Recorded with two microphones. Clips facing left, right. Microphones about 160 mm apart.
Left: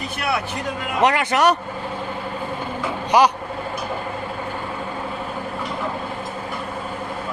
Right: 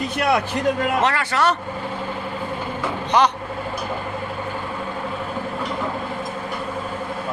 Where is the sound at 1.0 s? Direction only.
15° left (ahead or behind).